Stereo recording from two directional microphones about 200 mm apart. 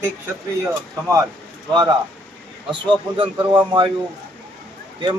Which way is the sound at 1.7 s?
20° right (ahead or behind).